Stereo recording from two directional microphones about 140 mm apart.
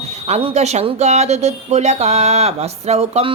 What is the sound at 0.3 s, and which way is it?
Speech, 50° right (ahead or behind).